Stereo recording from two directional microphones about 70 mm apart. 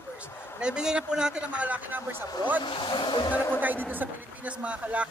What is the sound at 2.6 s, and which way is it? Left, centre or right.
Speech, left.